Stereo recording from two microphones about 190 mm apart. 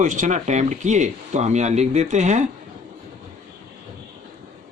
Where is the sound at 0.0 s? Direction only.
40° right (ahead or behind).